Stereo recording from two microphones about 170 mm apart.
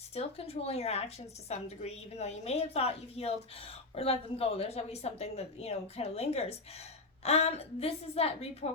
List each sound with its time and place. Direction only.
0.1 s a woman's voice: 35° left (ahead or behind)